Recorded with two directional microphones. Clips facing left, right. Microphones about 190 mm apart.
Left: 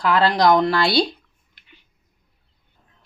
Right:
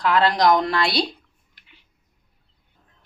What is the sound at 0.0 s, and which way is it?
Speech, 30° left (ahead or behind).